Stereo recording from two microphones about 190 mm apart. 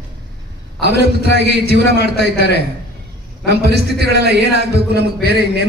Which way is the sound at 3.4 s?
60° right (ahead or behind).